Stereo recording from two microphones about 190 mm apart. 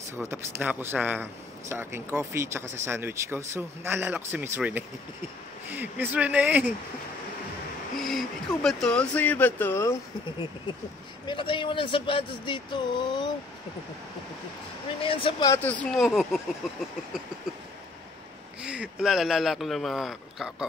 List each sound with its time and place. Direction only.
0.1 s a man's voice: 15° right (ahead or behind)
8.0 s speech: centre (ahead or behind)
11.2 s a man's voice: 25° left (ahead or behind)
15.0 s a man's voice: 30° left (ahead or behind)
15.5 s speech: 10° left (ahead or behind)
18.6 s speech: 5° right (ahead or behind)